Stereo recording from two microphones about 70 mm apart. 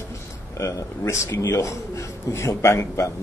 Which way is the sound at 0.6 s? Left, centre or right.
Left.